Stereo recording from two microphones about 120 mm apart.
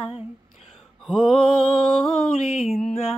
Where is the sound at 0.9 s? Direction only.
Centre (ahead or behind).